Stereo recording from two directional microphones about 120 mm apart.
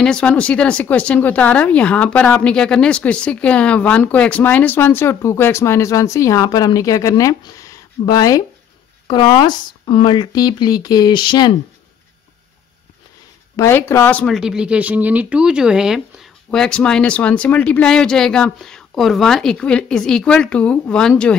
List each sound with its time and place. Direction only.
0.0 s speech: 10° left (ahead or behind); by 8.5 s 30° left (ahead or behind)
9.0 s speech: 40° left (ahead or behind)
13.6 s speech: 20° left (ahead or behind)
14.2 s speech: centre (ahead or behind)
16.4 s speech: 5° left (ahead or behind)